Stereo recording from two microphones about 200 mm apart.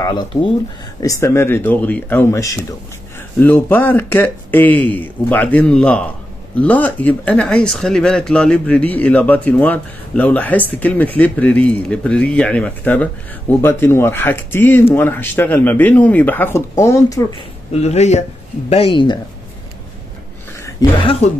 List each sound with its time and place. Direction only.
0.0 s speech: 20° left (ahead or behind)
17.4 s speech: 30° left (ahead or behind)
21.0 s speech: 30° left (ahead or behind)